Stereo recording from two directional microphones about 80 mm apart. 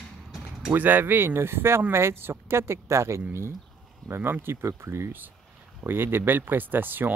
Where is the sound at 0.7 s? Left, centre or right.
Right.